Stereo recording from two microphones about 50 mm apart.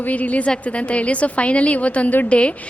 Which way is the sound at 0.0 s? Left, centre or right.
Left.